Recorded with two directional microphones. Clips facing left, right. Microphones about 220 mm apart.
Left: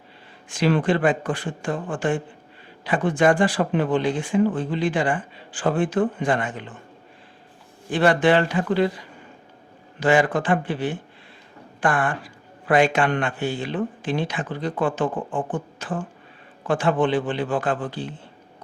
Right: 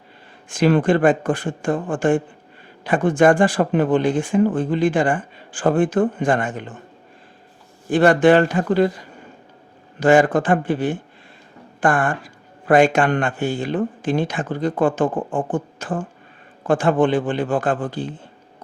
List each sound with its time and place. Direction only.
0.4 s speech: 50° right (ahead or behind)
7.9 s speech: 45° right (ahead or behind)